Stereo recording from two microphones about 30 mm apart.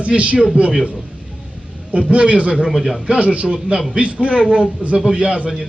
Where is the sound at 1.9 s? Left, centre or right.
Right.